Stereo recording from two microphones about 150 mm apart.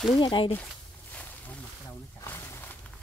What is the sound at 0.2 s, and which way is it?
Speech, 35° left (ahead or behind).